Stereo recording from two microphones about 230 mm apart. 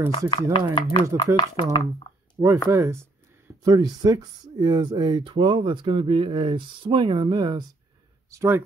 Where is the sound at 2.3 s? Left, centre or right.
Centre.